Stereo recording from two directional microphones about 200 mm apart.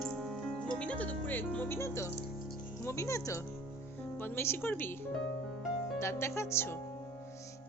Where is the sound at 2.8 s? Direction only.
15° left (ahead or behind).